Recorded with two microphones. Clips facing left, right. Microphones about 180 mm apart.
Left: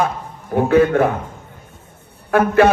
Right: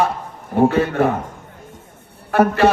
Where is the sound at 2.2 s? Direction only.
50° left (ahead or behind).